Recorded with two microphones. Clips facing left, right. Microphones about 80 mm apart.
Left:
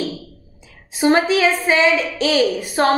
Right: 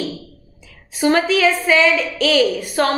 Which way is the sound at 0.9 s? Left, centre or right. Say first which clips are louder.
Left 1 dB; left.